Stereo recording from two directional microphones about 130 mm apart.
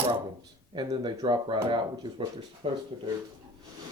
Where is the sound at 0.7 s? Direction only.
35° right (ahead or behind).